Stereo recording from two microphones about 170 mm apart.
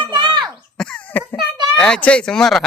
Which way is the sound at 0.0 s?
25° right (ahead or behind).